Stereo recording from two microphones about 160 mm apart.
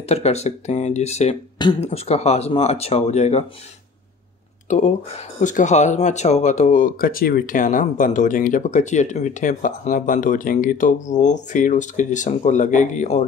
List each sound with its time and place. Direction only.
0.0 s speech: 40° left (ahead or behind)
4.6 s speech: 45° left (ahead or behind)